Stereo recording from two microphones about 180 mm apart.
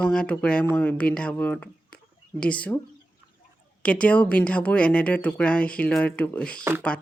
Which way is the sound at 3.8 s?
5° left (ahead or behind).